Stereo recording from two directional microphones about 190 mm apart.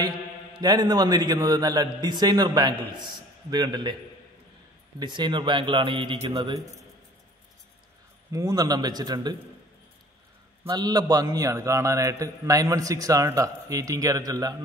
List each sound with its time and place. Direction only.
0.6 s a man's voice: 20° right (ahead or behind)
4.9 s a man's voice: 25° right (ahead or behind)
8.3 s a man's voice: 20° right (ahead or behind)
10.7 s a man's voice: 20° right (ahead or behind)